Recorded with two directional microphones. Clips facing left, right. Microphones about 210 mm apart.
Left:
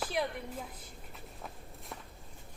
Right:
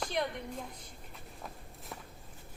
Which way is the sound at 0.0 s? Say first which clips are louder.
Even; 5° left (ahead or behind).